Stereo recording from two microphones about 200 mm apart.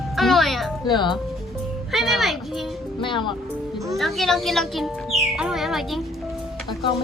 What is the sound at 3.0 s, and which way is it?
Speech, 25° left (ahead or behind).